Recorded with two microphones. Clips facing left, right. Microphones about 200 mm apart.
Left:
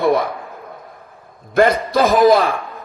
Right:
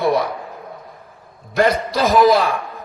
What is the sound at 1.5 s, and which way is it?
A man's voice, 50° left (ahead or behind).